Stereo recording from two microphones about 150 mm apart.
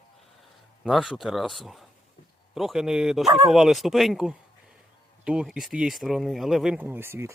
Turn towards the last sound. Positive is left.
turn(degrees=-15)  # may be behind; listen again after turning